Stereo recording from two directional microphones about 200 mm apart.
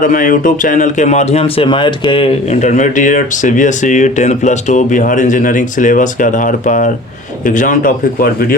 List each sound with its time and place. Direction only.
0.0 s speech: 40° left (ahead or behind)